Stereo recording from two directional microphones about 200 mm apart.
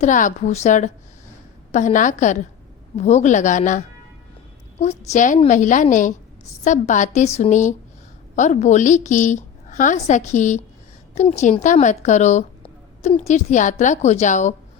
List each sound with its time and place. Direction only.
0.0 s a woman's voice: 40° left (ahead or behind)